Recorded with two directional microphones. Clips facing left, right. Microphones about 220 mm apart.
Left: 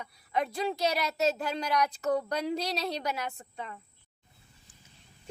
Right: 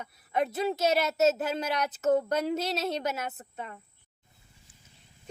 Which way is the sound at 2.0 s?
20° right (ahead or behind).